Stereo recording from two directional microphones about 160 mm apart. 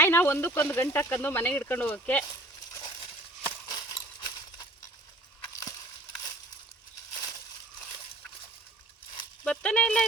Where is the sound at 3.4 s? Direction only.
25° left (ahead or behind).